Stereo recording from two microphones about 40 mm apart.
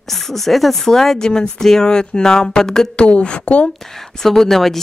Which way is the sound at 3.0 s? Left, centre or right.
Left.